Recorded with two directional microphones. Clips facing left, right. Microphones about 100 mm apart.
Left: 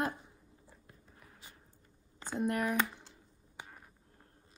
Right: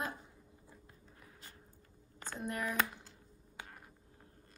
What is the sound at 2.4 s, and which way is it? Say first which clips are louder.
Speech: left 6 dB; 55° left (ahead or behind).